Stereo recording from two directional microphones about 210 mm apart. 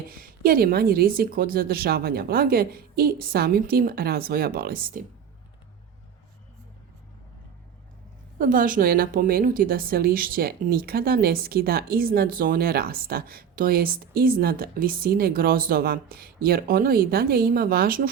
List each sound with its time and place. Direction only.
0.1 s a woman's voice: 45° right (ahead or behind)
8.4 s a woman's voice: 40° right (ahead or behind)